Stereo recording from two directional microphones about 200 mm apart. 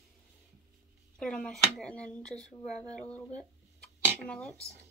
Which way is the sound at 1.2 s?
5° left (ahead or behind).